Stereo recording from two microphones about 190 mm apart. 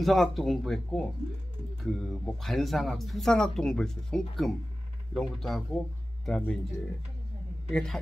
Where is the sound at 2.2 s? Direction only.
Centre (ahead or behind).